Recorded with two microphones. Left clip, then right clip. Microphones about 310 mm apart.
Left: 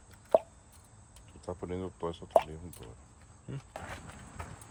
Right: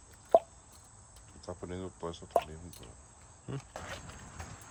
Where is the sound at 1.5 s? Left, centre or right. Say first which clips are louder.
Left 4 dB; left.